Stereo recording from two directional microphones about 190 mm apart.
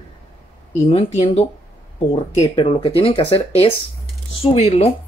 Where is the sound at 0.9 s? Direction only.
25° left (ahead or behind).